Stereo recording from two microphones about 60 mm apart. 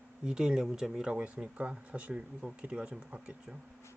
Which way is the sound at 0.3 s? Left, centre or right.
Centre.